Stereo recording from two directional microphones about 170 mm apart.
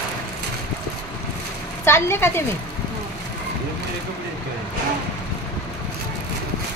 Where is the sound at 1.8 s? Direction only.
15° left (ahead or behind).